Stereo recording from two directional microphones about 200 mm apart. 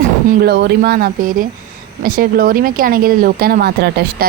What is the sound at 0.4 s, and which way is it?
Speech, 55° right (ahead or behind).